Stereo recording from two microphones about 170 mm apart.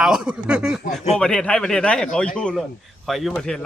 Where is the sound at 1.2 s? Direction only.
5° left (ahead or behind).